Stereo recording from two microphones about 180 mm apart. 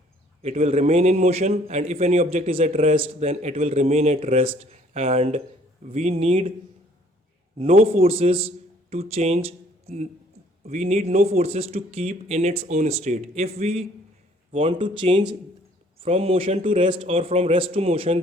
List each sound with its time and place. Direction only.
0.4 s speech: 35° right (ahead or behind)
7.6 s a man's voice: 35° right (ahead or behind)